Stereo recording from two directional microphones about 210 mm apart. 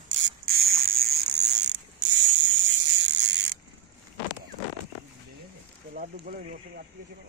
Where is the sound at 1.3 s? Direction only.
55° right (ahead or behind).